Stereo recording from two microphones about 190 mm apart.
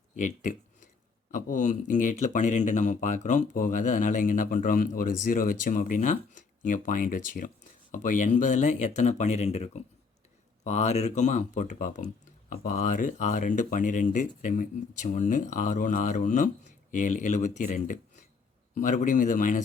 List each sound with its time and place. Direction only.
0.2 s speech: 40° left (ahead or behind)